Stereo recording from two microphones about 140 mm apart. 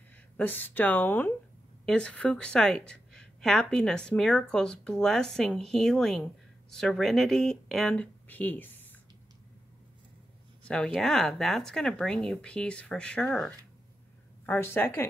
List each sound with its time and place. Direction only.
0.4 s a woman's voice: 10° left (ahead or behind)
10.7 s a woman's voice: 5° left (ahead or behind)
14.4 s speech: 15° left (ahead or behind)